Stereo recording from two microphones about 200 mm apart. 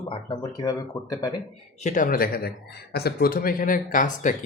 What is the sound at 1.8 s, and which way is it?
Speech, 40° left (ahead or behind).